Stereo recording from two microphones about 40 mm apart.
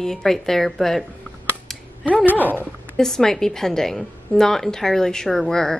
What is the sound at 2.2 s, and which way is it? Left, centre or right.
Speech, left.